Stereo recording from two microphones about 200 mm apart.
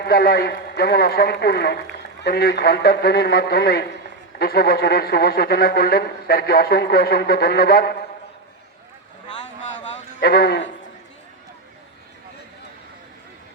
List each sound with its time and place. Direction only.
0.0 s a man's voice: 50° left (ahead or behind)
10.2 s a man's voice: 55° left (ahead or behind)